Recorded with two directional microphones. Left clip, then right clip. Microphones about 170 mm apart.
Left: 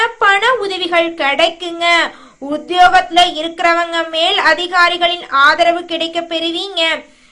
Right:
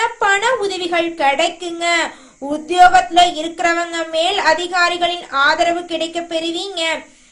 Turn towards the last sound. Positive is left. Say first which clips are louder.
# left 4 dB
turn(degrees=20)  # may be behind; listen again after turning